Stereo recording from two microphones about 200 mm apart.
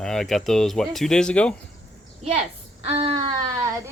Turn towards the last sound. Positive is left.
turn(degrees=-20)  # may be behind; listen again after turning